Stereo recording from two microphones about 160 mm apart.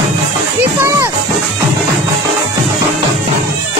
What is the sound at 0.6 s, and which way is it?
Music, 15° right (ahead or behind).